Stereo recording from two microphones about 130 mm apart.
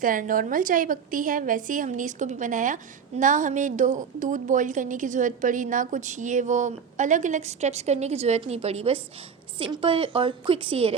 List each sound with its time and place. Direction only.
0.0 s a woman's voice: 90° right; by 10.9 s 45° right (ahead or behind)